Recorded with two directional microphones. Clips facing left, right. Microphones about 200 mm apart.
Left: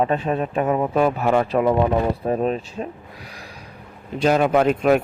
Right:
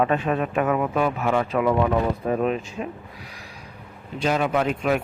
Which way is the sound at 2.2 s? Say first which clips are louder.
Left 1 dB; 35° left (ahead or behind).